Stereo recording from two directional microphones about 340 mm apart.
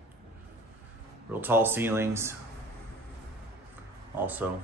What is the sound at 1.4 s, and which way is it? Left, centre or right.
Speech, centre.